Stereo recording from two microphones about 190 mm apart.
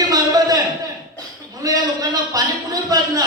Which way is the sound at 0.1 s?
20° right (ahead or behind).